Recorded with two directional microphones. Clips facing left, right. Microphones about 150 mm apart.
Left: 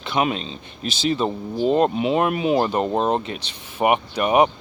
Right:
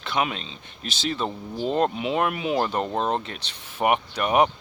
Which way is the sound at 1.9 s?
30° left (ahead or behind).